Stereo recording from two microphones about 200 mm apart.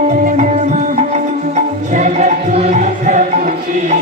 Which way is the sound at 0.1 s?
35° right (ahead or behind).